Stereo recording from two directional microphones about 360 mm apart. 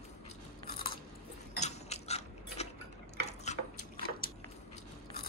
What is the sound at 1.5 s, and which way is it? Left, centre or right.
Mechanisms, centre.